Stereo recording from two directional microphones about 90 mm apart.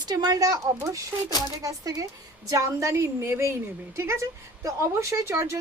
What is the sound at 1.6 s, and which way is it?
A woman's voice, 40° right (ahead or behind).